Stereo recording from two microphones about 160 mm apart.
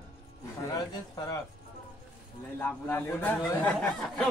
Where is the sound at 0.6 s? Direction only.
20° left (ahead or behind).